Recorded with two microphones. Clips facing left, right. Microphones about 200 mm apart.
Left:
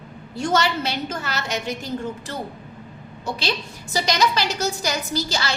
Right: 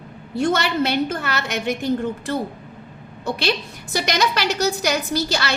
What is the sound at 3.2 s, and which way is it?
A woman's voice, 60° right (ahead or behind).